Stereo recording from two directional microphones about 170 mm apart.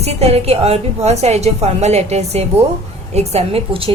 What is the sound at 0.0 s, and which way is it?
A woman's voice, 40° right (ahead or behind).